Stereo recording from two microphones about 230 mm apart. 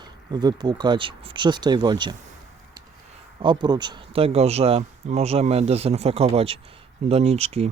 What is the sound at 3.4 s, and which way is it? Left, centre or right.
Speech, centre.